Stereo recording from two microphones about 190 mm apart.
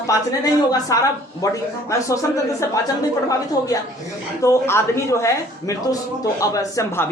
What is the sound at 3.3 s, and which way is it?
A woman's voice, 20° left (ahead or behind).